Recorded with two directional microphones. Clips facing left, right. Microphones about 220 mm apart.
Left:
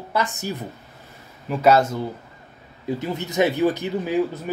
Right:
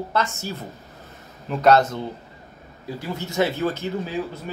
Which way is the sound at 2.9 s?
20° left (ahead or behind).